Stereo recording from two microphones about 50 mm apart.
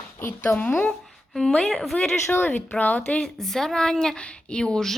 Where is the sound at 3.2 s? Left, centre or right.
Centre.